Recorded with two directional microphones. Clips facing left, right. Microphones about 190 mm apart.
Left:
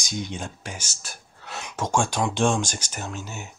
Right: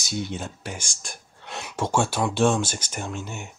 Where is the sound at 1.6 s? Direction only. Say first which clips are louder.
Right 1 dB; 5° right (ahead or behind).